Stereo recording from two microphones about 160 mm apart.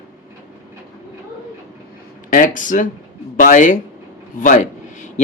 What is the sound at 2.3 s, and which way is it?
A man's voice, 55° left (ahead or behind).